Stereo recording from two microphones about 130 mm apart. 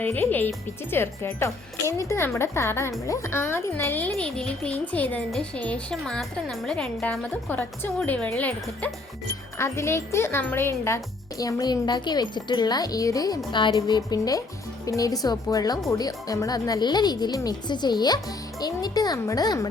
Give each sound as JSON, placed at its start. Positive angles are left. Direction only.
{"t": 0.0, "sound": "speech", "side_deg": 15}
{"t": 9.6, "sound": "speech", "side_deg": 20}